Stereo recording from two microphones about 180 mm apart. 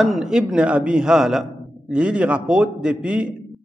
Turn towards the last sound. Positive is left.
turn(degrees=-5)  # may be behind; listen again after turning